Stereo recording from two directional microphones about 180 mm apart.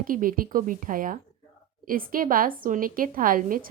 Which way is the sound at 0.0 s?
50° right (ahead or behind).